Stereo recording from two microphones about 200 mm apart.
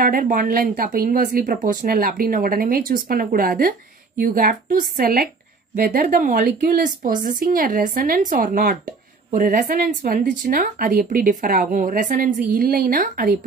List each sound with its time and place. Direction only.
0.0 s a woman's voice: 45° right (ahead or behind)